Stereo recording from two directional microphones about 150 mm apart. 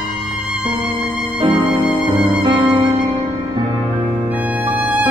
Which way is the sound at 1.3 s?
35° right (ahead or behind).